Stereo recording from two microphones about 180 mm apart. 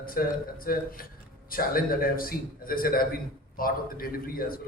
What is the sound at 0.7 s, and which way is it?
A man's voice, 55° left (ahead or behind).